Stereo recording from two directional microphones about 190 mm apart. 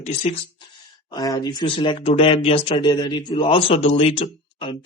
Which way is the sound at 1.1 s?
20° left (ahead or behind).